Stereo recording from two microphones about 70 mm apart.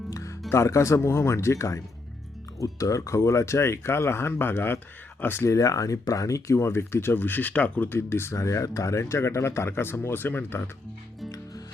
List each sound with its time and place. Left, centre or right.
0.1 s music: left
0.5 s speech: left
5.5 s speech: left
7.9 s speech: left
8.4 s speech: left